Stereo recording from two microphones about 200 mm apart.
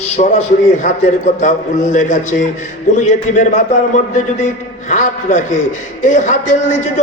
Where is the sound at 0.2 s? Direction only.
40° left (ahead or behind).